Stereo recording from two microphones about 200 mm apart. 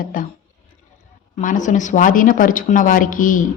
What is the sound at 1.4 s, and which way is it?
Speech, 40° left (ahead or behind).